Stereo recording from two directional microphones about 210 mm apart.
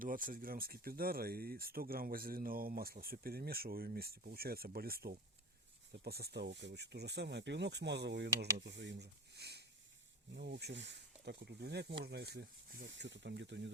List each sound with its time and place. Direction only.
0.0 s speech: 40° right (ahead or behind); by 13.7 s 60° right (ahead or behind)